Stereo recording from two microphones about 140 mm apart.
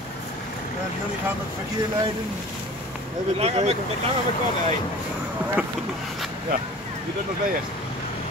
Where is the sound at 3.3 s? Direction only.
50° right (ahead or behind).